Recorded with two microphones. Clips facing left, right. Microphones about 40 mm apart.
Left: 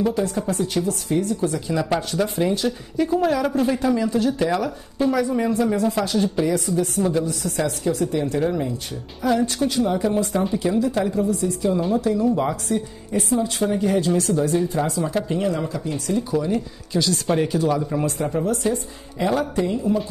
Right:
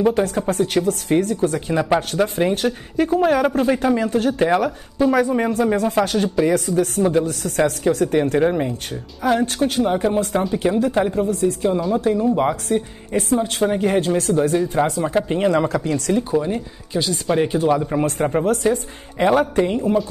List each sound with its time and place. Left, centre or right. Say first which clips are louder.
0.1 s a woman's voice: right 3 dB; right
4.4 s a woman's voice: right 4 dB; right
12.6 s a woman's voice: right 3 dB; right
15.5 s speech: right 7 dB; right
16.3 s speech: right 1 dB; right
17.6 s a woman's voice: right 3 dB; right